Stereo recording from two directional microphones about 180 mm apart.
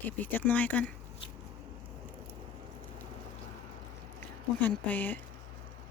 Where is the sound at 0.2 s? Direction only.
10° left (ahead or behind).